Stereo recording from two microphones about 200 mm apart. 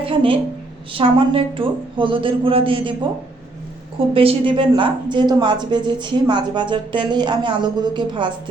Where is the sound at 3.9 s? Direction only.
25° right (ahead or behind).